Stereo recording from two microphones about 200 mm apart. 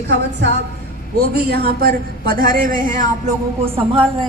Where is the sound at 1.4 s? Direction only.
50° right (ahead or behind).